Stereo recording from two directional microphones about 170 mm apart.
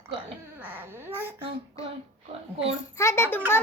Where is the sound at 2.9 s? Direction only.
15° left (ahead or behind).